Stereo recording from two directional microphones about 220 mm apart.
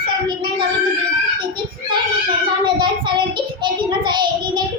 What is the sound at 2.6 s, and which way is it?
Child singing, 20° right (ahead or behind).